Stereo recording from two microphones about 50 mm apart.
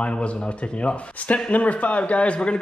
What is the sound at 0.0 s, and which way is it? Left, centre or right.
A man's voice, left.